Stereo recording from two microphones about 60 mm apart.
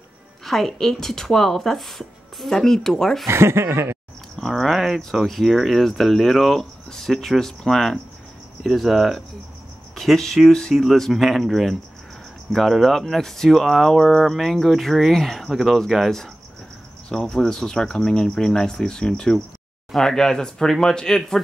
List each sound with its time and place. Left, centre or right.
0.5 s speech: centre
3.3 s speech: right
4.4 s speech: centre